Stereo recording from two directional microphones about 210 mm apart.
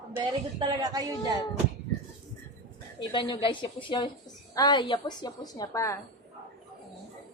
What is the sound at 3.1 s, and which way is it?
A woman's voice, 20° left (ahead or behind).